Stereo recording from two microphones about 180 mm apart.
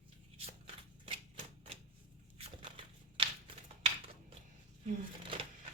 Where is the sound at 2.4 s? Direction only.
30° right (ahead or behind).